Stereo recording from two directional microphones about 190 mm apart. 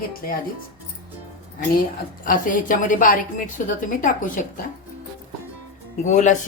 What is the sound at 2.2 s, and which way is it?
Speech, 45° left (ahead or behind).